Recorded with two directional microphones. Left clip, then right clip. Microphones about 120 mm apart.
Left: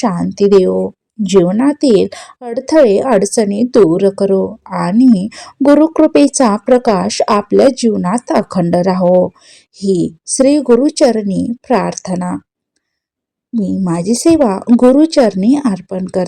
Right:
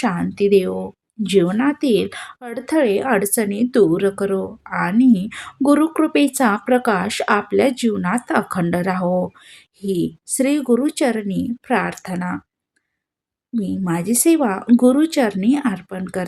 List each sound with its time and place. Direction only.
0.0 s speech: 20° left (ahead or behind)
1.2 s speech: 20° left (ahead or behind)
1.6 s speech: 30° left (ahead or behind)
9.0 s speech: 5° right (ahead or behind)
9.8 s speech: 35° left (ahead or behind)
13.5 s speech: 25° left (ahead or behind)